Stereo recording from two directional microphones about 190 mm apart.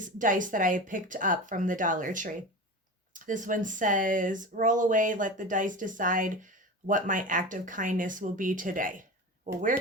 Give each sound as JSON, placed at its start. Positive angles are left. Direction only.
{"t": 0.0, "sound": "speech", "side_deg": -45}